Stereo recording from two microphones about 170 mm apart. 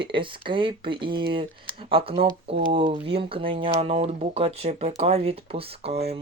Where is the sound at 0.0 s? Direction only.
30° right (ahead or behind).